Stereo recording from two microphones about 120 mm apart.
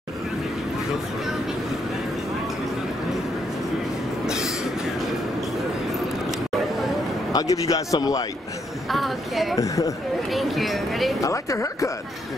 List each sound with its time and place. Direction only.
7.3 s a man's voice: 30° left (ahead or behind)
8.8 s speech: centre (ahead or behind)
9.6 s a man's voice: 25° left (ahead or behind)
10.3 s speech: centre (ahead or behind)
11.1 s a man's voice: 25° left (ahead or behind)